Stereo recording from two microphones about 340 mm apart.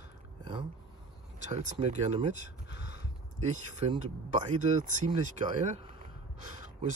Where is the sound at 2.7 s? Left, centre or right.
Left.